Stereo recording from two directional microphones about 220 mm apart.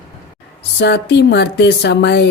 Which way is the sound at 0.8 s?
50° left (ahead or behind).